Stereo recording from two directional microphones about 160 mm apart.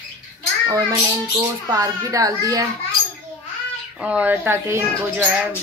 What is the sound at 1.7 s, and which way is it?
Speech, 20° right (ahead or behind).